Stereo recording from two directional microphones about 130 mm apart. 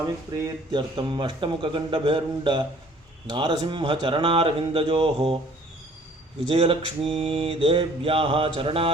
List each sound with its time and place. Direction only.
0.0 s a man's voice: 30° right (ahead or behind)
6.5 s mantra: 45° right (ahead or behind)